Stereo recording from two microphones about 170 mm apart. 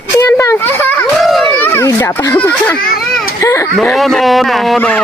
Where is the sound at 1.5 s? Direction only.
15° left (ahead or behind).